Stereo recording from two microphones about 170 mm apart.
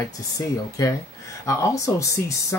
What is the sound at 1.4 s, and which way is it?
Speech, 20° left (ahead or behind).